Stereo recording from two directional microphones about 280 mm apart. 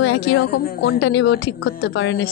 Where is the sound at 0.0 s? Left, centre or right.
Left.